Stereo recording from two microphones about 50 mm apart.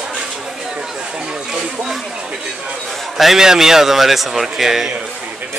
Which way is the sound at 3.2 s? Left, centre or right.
Centre.